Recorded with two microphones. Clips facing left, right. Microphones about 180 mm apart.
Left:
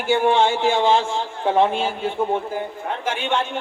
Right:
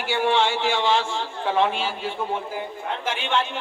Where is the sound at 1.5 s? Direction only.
50° left (ahead or behind).